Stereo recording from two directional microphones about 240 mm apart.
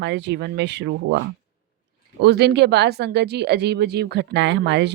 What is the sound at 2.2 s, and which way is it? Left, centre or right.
Speech, right.